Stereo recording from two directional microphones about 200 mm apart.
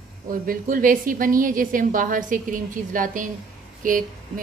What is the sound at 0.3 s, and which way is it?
A woman's voice, 45° right (ahead or behind).